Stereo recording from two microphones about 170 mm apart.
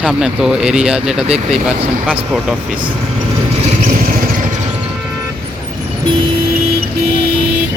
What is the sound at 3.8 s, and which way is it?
Vehicle, 50° right (ahead or behind).